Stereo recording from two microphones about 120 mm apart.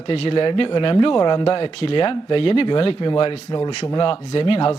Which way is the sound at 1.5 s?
55° left (ahead or behind).